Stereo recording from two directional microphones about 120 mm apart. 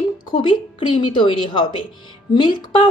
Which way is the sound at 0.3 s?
45° left (ahead or behind).